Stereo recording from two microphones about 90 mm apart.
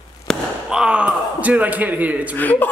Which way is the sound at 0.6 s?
10° right (ahead or behind).